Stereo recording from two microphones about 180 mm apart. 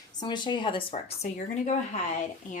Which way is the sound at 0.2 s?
25° left (ahead or behind).